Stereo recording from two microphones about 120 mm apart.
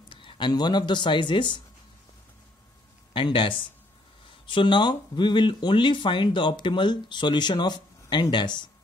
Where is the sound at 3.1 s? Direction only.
45° left (ahead or behind).